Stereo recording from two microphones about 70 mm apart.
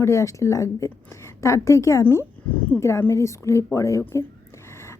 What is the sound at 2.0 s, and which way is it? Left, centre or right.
Speech, left.